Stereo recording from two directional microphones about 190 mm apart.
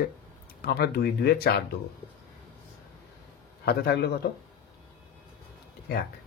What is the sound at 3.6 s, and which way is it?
Speech, 55° left (ahead or behind).